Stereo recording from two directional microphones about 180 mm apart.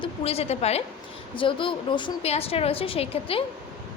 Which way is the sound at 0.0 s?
35° left (ahead or behind).